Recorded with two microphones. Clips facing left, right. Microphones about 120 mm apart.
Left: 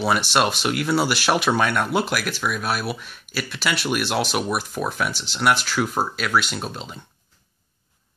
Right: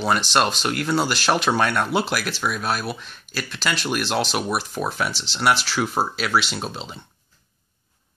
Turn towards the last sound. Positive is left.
turn(degrees=0)  # may be behind; listen again after turning